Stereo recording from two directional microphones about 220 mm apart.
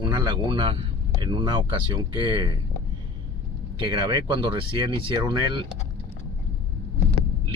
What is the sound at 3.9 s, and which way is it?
Speech, 20° right (ahead or behind).